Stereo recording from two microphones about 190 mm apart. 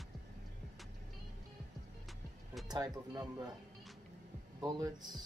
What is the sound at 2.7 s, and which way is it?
Speech, 20° right (ahead or behind).